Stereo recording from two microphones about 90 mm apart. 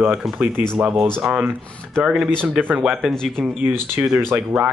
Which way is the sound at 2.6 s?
20° right (ahead or behind).